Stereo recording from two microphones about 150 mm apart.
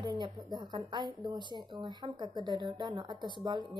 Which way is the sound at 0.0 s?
30° right (ahead or behind).